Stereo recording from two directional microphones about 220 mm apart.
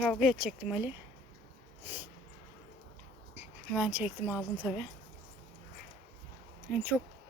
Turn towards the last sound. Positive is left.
turn(degrees=-5)  # may be behind; listen again after turning